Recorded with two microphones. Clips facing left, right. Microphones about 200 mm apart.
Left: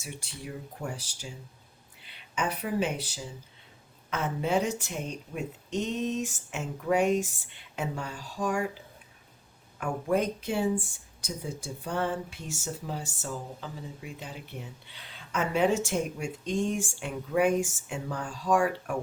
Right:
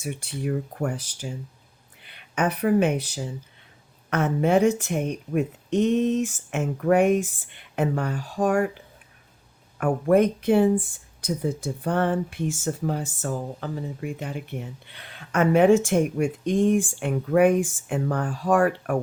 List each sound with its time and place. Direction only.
0.0 s speech: 55° right (ahead or behind)
9.8 s speech: 55° right (ahead or behind)